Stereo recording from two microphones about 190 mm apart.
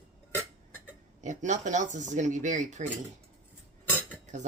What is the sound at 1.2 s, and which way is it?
Speech, 40° right (ahead or behind).